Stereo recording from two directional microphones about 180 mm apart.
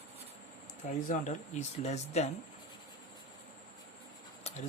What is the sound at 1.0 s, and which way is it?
Speech, 40° left (ahead or behind).